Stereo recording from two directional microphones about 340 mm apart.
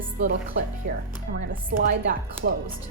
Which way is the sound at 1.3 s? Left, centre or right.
Right.